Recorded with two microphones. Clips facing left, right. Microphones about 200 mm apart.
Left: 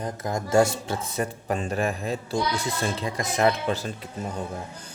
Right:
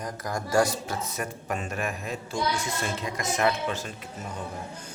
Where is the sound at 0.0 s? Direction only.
25° left (ahead or behind).